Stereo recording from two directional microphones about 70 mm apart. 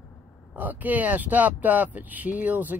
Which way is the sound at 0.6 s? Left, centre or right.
Right.